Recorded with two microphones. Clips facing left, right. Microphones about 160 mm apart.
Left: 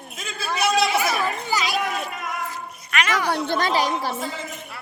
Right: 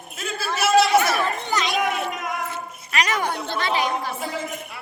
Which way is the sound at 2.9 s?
35° right (ahead or behind).